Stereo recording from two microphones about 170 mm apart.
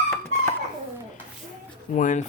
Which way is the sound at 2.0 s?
50° left (ahead or behind).